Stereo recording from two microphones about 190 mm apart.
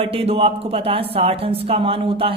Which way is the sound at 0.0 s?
30° right (ahead or behind).